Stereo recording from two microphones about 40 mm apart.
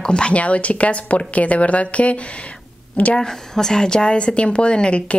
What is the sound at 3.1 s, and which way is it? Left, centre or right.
A woman's voice, centre.